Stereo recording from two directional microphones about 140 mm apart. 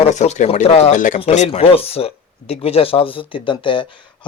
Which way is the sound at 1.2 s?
50° left (ahead or behind).